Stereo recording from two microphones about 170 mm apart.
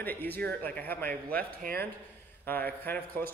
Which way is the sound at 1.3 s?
60° right (ahead or behind).